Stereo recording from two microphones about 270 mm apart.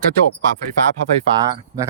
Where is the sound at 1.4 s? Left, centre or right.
Centre.